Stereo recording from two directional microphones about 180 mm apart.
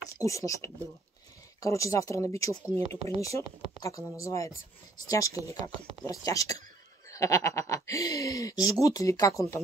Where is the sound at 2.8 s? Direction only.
35° right (ahead or behind).